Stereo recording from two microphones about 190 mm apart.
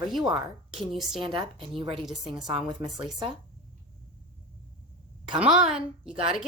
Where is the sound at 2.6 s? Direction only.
Centre (ahead or behind).